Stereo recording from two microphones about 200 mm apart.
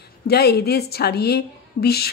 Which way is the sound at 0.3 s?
55° left (ahead or behind).